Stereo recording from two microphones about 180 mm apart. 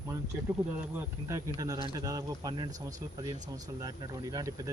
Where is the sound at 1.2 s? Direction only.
15° right (ahead or behind).